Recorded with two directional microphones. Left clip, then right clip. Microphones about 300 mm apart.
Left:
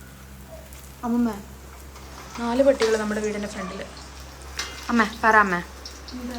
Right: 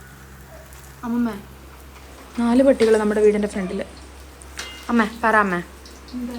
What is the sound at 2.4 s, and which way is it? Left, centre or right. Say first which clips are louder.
Speech: right 4 dB; right.